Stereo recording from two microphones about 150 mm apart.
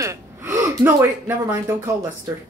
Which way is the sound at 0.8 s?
15° right (ahead or behind).